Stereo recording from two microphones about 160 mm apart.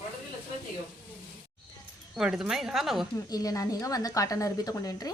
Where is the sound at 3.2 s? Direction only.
20° left (ahead or behind).